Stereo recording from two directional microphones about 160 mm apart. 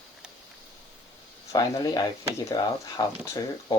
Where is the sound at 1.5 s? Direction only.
25° left (ahead or behind).